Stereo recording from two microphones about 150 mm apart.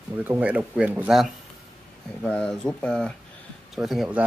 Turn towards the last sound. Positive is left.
turn(degrees=-5)  # may be behind; listen again after turning